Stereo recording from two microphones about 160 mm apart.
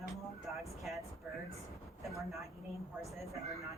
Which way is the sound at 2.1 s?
Centre (ahead or behind).